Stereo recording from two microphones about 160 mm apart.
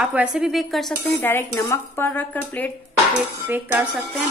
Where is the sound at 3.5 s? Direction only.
10° right (ahead or behind).